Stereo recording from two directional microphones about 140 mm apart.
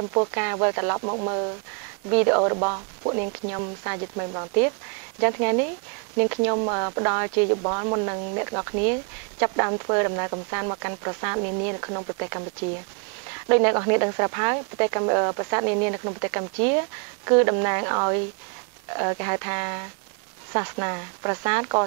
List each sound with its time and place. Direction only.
0.3 s speech: 20° right (ahead or behind)
13.5 s speech: 20° right (ahead or behind)